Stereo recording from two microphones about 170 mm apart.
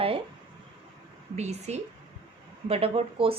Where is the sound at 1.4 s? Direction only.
40° right (ahead or behind).